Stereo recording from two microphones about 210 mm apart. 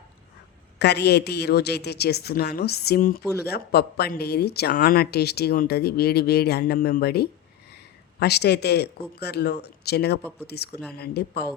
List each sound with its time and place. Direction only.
0.8 s speech: 50° left (ahead or behind)